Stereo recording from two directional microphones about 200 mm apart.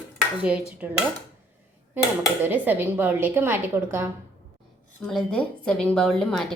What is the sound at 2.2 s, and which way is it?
Speech, 10° right (ahead or behind).